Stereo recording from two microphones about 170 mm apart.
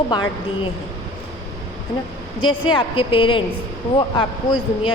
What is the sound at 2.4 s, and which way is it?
A woman's voice, 30° left (ahead or behind).